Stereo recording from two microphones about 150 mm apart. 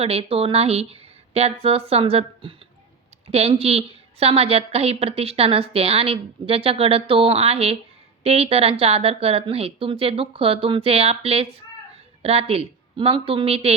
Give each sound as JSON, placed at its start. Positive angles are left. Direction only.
{"t": 0.0, "sound": "a woman's voice", "side_deg": -40}